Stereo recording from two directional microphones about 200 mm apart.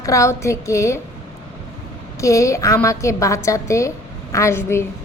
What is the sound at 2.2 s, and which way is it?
A woman's voice, 15° left (ahead or behind).